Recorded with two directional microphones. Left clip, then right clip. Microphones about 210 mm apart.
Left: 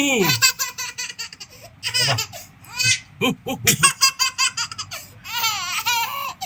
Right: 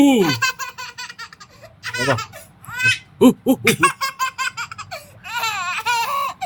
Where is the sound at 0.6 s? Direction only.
10° right (ahead or behind).